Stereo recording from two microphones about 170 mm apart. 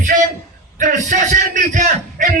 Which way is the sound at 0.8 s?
50° right (ahead or behind).